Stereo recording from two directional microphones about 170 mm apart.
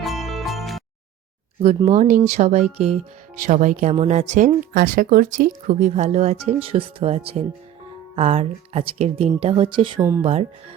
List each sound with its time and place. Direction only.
0.0 s music: centre (ahead or behind)
1.6 s speech: 35° right (ahead or behind)